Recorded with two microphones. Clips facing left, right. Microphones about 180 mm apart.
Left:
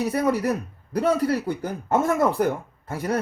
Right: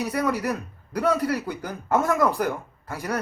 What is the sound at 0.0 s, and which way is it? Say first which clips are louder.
Speech: left 3 dB; 25° left (ahead or behind).